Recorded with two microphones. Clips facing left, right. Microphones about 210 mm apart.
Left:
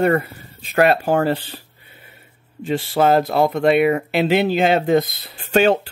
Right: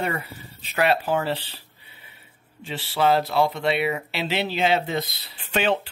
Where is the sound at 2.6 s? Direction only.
45° left (ahead or behind).